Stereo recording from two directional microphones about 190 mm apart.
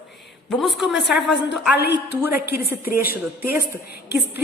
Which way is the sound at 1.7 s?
60° left (ahead or behind).